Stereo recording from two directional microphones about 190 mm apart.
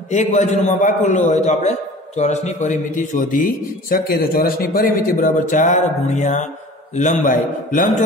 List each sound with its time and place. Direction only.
0.1 s a man's voice: 40° left (ahead or behind)